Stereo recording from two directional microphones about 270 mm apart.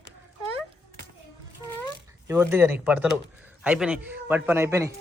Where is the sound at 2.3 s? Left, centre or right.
Centre.